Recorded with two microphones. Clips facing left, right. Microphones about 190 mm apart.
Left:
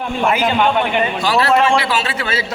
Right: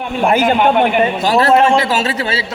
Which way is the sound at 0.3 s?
45° right (ahead or behind).